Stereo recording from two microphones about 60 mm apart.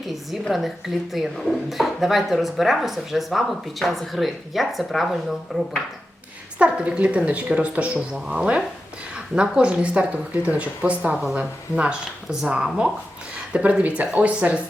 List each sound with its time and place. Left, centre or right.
0.0 s a woman's voice: centre
6.6 s speech: centre